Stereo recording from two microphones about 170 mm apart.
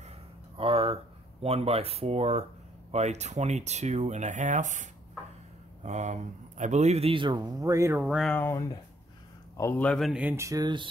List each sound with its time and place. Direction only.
0.6 s a sound: 35° right (ahead or behind)
1.4 s speech: 35° right (ahead or behind)
5.9 s speech: 45° right (ahead or behind); by 8.0 s 20° right (ahead or behind)
8.0 s speech: 5° right (ahead or behind)
8.3 s speech: 10° left (ahead or behind); by 10.9 s 25° right (ahead or behind)